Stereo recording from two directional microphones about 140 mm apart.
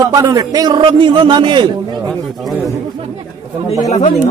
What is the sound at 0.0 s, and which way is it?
A man's voice, 25° right (ahead or behind).